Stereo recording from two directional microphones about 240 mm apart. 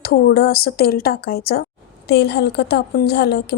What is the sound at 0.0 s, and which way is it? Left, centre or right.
A woman's voice, left.